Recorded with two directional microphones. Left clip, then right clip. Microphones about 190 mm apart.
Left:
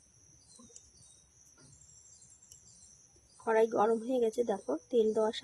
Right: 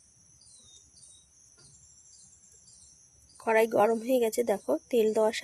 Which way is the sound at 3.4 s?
30° right (ahead or behind).